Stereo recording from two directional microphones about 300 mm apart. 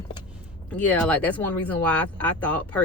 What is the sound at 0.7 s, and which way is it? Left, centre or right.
Speech, centre.